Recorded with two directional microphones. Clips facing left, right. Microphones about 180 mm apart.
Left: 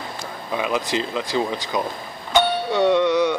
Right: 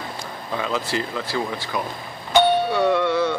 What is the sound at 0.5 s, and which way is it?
Speech, 15° left (ahead or behind).